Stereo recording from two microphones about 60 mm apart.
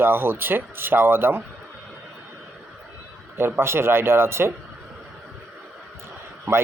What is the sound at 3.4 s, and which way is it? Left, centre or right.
Speech, right.